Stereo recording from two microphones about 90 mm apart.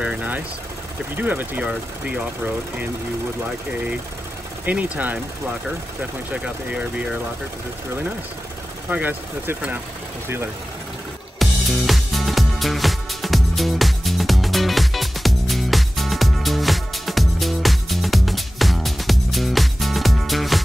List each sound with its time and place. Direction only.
0.0 s vehicle: 15° right (ahead or behind)
1.1 s speech: 20° right (ahead or behind)
4.9 s speech: 20° right (ahead or behind)
6.3 s speech: 15° right (ahead or behind)
8.8 s speech: 20° right (ahead or behind)
11.3 s music: centre (ahead or behind)